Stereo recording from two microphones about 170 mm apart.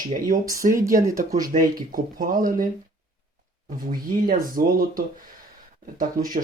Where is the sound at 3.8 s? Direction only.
55° right (ahead or behind).